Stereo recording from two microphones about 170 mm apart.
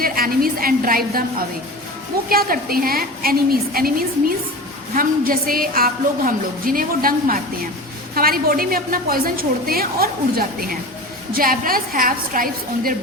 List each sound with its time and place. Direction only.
0.0 s a woman's voice: 60° right (ahead or behind)